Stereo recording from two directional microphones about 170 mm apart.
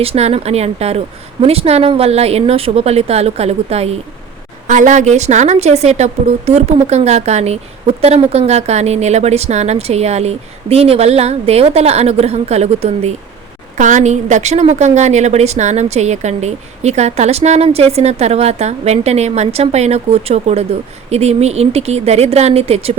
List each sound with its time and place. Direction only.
0.0 s a woman's voice: 35° right (ahead or behind)